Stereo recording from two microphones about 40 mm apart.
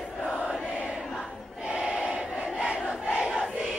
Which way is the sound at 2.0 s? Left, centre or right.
Right.